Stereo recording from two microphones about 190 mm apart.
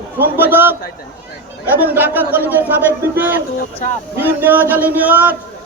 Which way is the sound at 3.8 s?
40° left (ahead or behind).